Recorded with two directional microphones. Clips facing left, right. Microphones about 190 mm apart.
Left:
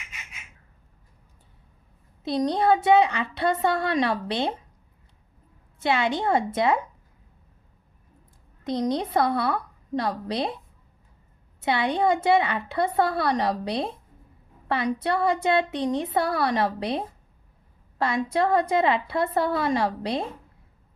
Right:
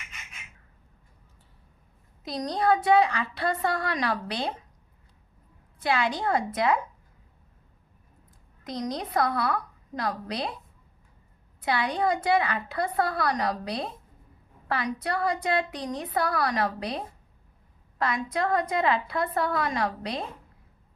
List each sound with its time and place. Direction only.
2.2 s a woman's voice: 25° left (ahead or behind)
5.8 s a woman's voice: 25° left (ahead or behind)
8.6 s a woman's voice: 30° left (ahead or behind)
11.6 s a woman's voice: 25° left (ahead or behind)